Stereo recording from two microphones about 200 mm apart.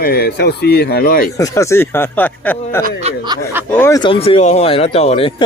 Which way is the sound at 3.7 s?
10° left (ahead or behind).